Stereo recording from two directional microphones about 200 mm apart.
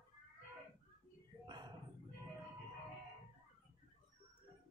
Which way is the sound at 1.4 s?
20° right (ahead or behind).